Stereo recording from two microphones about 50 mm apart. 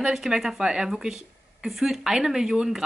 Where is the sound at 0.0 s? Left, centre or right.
Centre.